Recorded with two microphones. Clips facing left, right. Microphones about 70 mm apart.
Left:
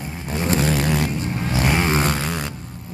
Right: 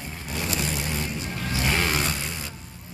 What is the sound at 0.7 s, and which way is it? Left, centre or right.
Vehicle, left.